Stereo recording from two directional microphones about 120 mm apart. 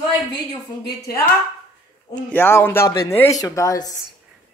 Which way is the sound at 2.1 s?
15° left (ahead or behind).